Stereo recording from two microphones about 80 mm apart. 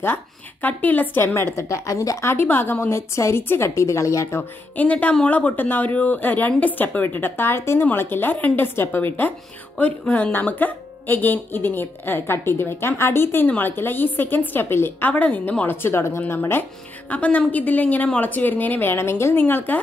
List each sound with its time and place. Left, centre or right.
0.0 s speech: left
2.2 s a woman's voice: left
4.4 s speech: centre
17.1 s speech: centre